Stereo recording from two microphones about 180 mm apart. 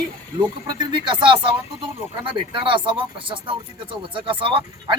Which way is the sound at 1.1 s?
25° right (ahead or behind).